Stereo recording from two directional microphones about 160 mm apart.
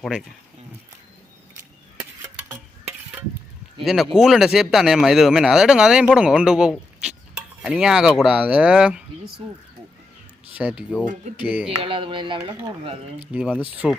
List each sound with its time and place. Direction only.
0.0 s speech: 5° right (ahead or behind)
3.8 s speech: centre (ahead or behind)
9.4 s speech: 35° right (ahead or behind)
10.5 s speech: 5° right (ahead or behind)
11.7 s speech: 35° right (ahead or behind)
13.6 s speech: 10° right (ahead or behind)